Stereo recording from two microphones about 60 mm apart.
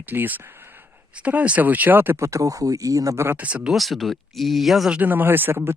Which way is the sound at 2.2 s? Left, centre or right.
Right.